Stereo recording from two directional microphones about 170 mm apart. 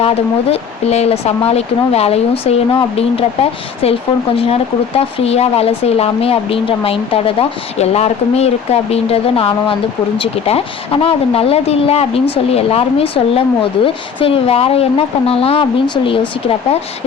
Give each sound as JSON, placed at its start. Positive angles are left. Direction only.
{"t": 0.0, "sound": "speech", "side_deg": 35}